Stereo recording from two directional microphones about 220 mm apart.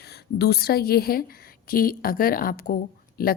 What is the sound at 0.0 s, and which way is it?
A woman's voice, 45° left (ahead or behind).